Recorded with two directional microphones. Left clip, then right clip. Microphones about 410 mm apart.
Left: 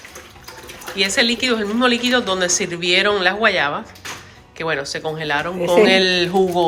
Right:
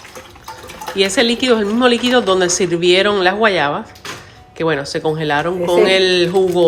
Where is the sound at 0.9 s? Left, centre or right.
Centre.